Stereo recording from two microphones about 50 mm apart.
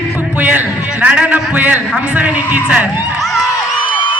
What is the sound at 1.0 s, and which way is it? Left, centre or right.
A man's voice, right.